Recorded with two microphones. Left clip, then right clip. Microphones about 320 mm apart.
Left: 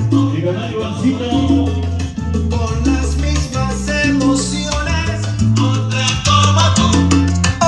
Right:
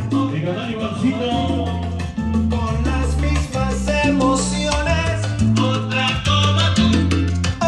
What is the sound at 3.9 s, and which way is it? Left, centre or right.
Salsa music, centre.